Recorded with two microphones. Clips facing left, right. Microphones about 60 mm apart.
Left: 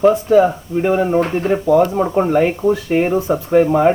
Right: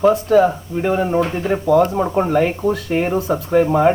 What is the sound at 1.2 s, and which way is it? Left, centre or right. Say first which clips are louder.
Speech: left 2 dB; left.